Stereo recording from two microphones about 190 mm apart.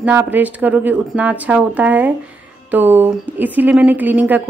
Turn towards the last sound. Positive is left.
turn(degrees=-10)  # may be behind; listen again after turning